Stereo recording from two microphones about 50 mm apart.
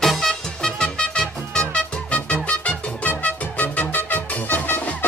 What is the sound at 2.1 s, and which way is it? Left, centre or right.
Music, left.